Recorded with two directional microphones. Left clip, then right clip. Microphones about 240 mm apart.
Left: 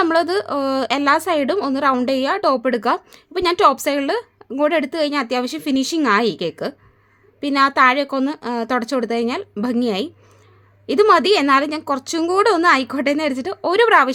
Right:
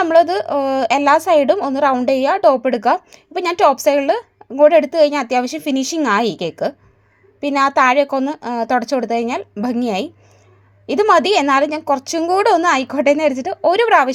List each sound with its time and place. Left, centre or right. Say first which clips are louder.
0.0 s a woman's voice: right 4 dB; centre